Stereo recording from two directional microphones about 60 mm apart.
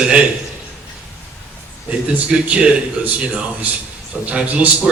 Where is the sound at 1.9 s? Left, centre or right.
Right.